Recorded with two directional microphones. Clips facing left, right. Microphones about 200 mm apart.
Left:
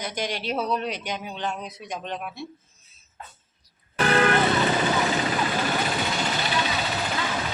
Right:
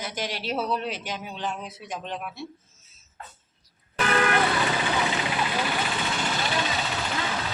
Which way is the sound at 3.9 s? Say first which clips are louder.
Left 3 dB; 35° left (ahead or behind).